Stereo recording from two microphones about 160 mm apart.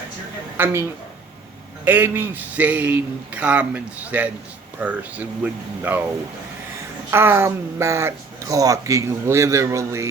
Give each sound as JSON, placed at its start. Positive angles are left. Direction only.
{"t": 0.5, "sound": "speech", "side_deg": -15}
{"t": 7.1, "sound": "speech", "side_deg": -15}